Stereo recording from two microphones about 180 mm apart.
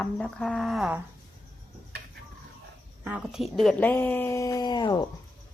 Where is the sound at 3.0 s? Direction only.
5° right (ahead or behind); by 5.0 s 25° left (ahead or behind).